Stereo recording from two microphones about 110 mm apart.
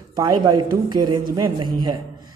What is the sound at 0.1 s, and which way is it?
A man's voice, 40° right (ahead or behind).